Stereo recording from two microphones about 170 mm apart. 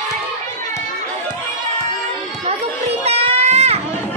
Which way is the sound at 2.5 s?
35° right (ahead or behind).